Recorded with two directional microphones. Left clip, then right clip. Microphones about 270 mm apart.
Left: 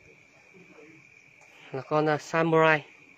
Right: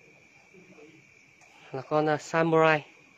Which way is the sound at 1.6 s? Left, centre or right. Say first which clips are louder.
Even; centre.